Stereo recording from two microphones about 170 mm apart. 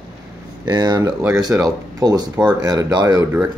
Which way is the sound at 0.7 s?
25° right (ahead or behind).